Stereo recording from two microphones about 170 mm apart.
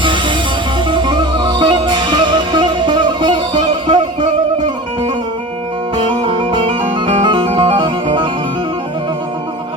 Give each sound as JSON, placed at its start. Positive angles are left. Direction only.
{"t": 0.0, "sound": "music", "side_deg": -30}
{"t": 6.2, "sound": "music", "side_deg": -30}